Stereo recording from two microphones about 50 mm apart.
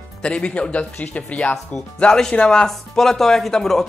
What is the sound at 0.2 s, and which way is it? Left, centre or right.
Speech, left.